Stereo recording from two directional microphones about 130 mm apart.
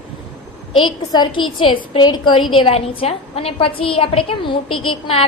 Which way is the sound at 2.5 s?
45° left (ahead or behind).